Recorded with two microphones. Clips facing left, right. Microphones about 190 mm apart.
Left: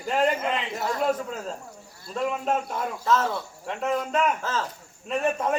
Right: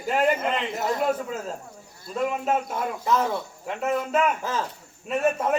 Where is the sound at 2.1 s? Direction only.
5° right (ahead or behind).